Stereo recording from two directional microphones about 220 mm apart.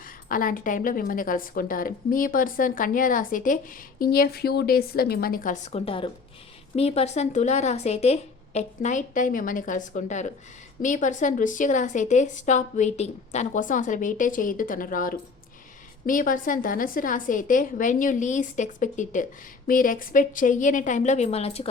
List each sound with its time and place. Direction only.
0.0 s a woman's voice: 40° left (ahead or behind)